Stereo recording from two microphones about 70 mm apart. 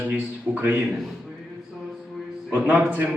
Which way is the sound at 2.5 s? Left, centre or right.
Right.